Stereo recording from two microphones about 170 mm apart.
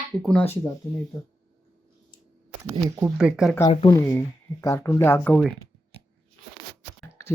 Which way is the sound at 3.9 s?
15° left (ahead or behind).